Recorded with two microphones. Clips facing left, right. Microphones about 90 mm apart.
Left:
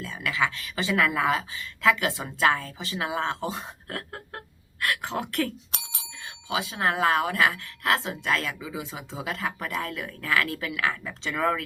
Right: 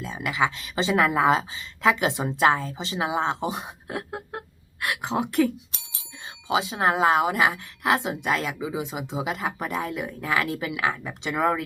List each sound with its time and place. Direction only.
0.0 s speech: 20° right (ahead or behind)
5.7 s bicycle bell: 65° left (ahead or behind)
6.5 s speech: 20° right (ahead or behind)